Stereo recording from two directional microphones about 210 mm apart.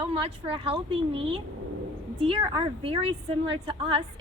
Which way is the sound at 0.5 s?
25° right (ahead or behind).